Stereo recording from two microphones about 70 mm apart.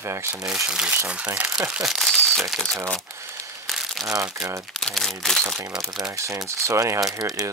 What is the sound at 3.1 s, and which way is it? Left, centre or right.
Crumpling, right.